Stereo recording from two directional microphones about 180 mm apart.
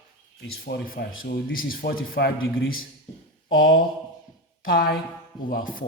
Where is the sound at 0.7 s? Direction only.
60° left (ahead or behind).